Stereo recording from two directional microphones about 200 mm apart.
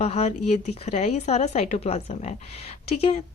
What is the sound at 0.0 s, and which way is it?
Speech, 30° left (ahead or behind).